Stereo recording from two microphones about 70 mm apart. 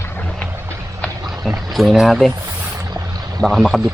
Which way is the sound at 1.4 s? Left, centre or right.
Centre.